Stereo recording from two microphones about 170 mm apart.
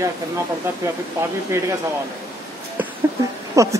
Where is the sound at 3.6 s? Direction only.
20° right (ahead or behind).